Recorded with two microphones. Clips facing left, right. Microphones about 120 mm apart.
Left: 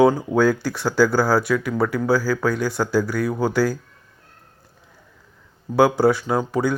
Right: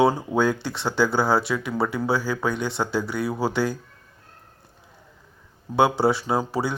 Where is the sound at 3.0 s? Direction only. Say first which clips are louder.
Left 3 dB; centre (ahead or behind).